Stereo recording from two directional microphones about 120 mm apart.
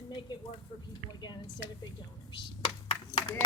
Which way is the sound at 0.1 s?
40° left (ahead or behind).